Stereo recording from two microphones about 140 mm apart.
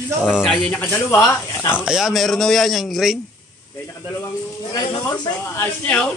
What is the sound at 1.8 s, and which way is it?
A man's voice, 5° right (ahead or behind).